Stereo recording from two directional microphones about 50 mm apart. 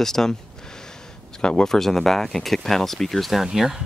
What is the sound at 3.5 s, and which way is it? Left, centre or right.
Speech, centre.